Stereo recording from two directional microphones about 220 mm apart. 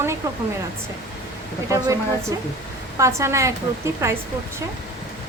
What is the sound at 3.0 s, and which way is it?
Speech, 15° right (ahead or behind).